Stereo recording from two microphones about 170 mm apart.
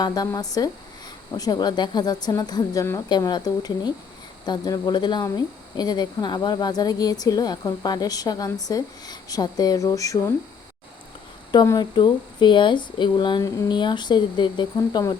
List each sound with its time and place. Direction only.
0.0 s speech: 25° left (ahead or behind)
11.5 s speech: 20° left (ahead or behind)